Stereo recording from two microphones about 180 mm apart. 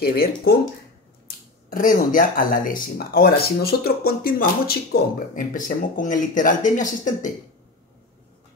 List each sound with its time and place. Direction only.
0.0 s speech: 60° left (ahead or behind)
1.2 s speech: 50° left (ahead or behind)